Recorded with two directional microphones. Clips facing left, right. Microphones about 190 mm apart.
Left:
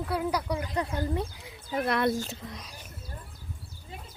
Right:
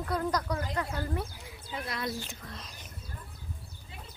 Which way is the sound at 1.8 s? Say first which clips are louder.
Left 10 dB; 60° left (ahead or behind).